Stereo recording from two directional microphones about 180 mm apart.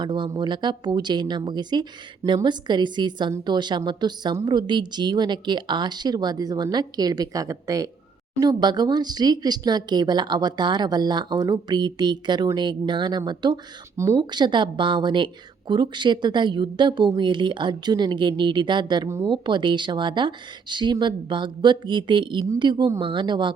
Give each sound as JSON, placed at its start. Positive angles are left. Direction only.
{"t": 0.0, "sound": "speech", "side_deg": -25}
{"t": 19.3, "sound": "speech", "side_deg": -25}